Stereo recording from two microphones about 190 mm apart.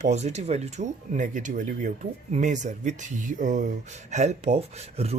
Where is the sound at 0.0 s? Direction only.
35° right (ahead or behind).